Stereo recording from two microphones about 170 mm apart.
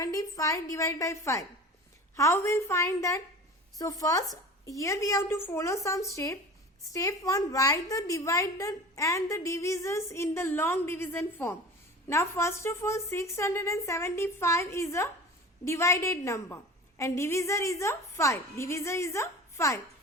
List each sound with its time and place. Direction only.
0.0 s a woman's voice: 20° left (ahead or behind)